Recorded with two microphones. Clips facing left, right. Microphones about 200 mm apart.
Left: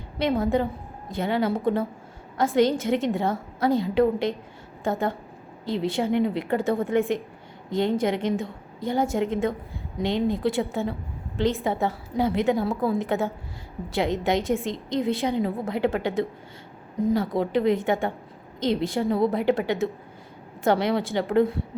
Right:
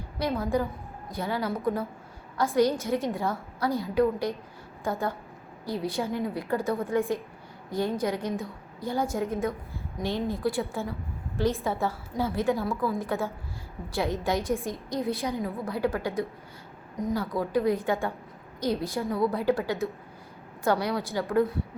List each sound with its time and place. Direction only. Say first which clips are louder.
0.2 s a woman's voice: left 4 dB; 25° left (ahead or behind)